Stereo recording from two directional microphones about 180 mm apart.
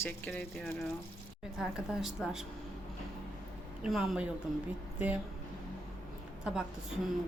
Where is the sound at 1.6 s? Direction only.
5° right (ahead or behind).